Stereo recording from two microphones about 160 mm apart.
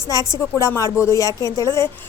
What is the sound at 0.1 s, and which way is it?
A woman's voice, 20° left (ahead or behind).